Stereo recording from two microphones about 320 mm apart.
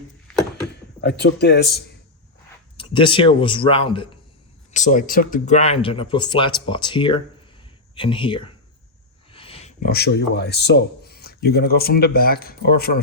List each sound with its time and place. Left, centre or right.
1.0 s speech: left
2.7 s speech: centre